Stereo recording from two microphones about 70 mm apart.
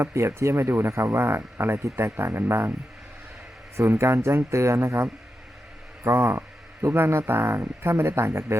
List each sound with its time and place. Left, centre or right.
0.0 s speech: right
3.8 s speech: right
6.1 s speech: right